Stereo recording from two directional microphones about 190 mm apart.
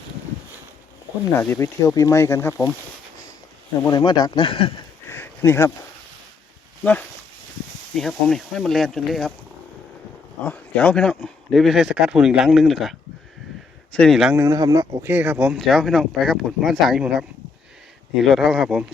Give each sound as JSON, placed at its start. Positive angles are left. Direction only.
{"t": 1.4, "sound": "speech", "side_deg": 15}
{"t": 3.8, "sound": "speech", "side_deg": 20}
{"t": 5.0, "sound": "a sound", "side_deg": 10}
{"t": 7.9, "sound": "speech", "side_deg": 0}
{"t": 10.4, "sound": "speech", "side_deg": 10}